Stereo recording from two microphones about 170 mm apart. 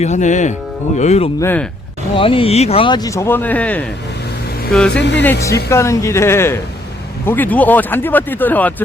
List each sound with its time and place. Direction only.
0.0 s speech: 45° left (ahead or behind)
1.4 s speech: 10° left (ahead or behind)
2.1 s speech: 30° left (ahead or behind); by 3.8 s 10° left (ahead or behind)
4.9 s speech: 90° left
5.2 s speech: 15° left (ahead or behind)